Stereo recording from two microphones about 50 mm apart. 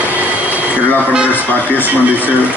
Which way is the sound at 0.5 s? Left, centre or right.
Right.